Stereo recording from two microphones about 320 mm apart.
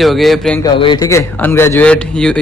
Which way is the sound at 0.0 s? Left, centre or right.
Centre.